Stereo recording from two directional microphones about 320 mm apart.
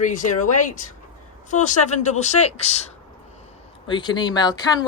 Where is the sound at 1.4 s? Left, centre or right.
Left.